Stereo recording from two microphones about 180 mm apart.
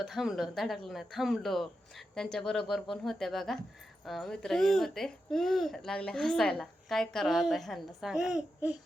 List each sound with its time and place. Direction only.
0.0 s speech: centre (ahead or behind)